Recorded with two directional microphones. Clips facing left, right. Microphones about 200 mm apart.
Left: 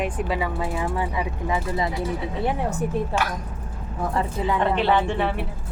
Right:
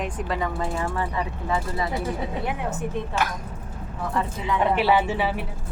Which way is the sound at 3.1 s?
35° left (ahead or behind).